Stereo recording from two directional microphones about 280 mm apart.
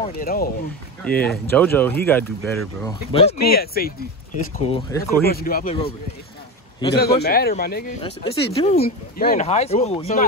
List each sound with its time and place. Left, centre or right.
0.2 s speech: left
1.0 s speech: centre
2.8 s speech: centre
3.3 s speech: left
4.6 s speech: centre
5.2 s speech: left
5.7 s speech: centre
7.0 s speech: left
8.0 s speech: centre